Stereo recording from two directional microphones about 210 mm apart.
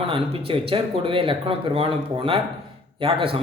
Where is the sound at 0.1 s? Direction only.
25° right (ahead or behind).